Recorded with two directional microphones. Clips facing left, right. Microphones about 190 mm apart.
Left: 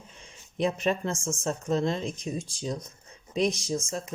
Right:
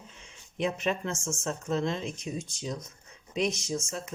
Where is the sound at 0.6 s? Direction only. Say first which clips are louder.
Left 3 dB; 35° left (ahead or behind).